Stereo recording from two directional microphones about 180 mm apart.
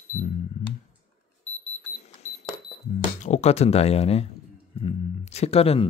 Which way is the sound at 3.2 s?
40° left (ahead or behind).